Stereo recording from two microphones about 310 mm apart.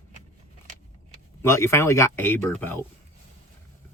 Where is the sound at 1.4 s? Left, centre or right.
Centre.